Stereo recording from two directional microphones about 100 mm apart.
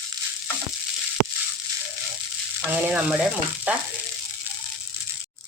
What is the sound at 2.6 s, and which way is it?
Speech, 15° right (ahead or behind).